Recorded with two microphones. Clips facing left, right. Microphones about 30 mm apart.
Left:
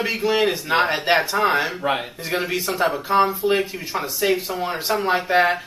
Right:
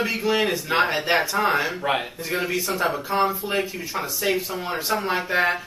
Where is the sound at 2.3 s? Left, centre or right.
Left.